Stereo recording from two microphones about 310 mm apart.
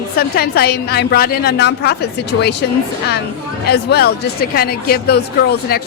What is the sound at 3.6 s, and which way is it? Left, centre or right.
A woman's voice, left.